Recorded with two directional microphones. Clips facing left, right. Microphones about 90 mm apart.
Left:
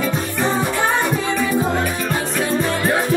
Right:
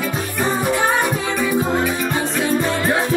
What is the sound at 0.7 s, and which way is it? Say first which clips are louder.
Music: right 1 dB; 10° right (ahead or behind).